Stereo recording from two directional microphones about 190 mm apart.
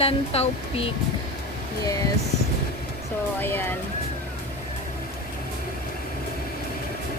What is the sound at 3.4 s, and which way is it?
Speech, 10° left (ahead or behind).